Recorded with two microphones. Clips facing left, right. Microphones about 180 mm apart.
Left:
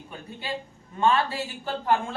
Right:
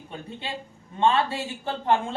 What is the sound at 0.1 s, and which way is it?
A woman's voice, 25° right (ahead or behind).